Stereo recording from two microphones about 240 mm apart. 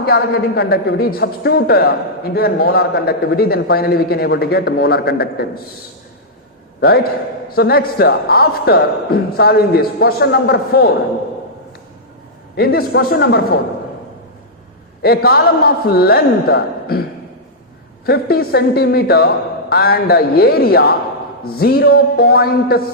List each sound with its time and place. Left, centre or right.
0.0 s speech: left
6.7 s a man's voice: left
12.5 s speech: left
15.0 s speech: left
18.0 s speech: left